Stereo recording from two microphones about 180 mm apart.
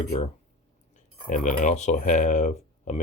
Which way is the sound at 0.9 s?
45° left (ahead or behind).